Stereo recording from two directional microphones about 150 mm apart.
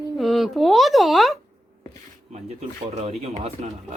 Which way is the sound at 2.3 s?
50° right (ahead or behind).